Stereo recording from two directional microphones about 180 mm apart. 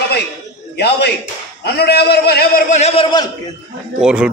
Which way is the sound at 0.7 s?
65° left (ahead or behind).